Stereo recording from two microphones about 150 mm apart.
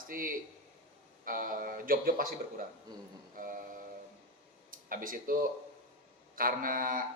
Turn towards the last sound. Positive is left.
turn(degrees=-70)  # may be behind; listen again after turning